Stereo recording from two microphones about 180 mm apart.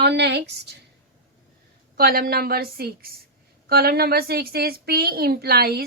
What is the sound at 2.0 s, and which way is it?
A woman's voice, 55° right (ahead or behind).